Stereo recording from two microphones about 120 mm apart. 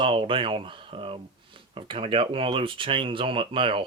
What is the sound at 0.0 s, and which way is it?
Speech, 45° right (ahead or behind).